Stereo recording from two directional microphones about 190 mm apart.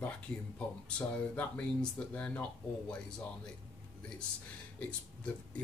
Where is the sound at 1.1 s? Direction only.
5° left (ahead or behind).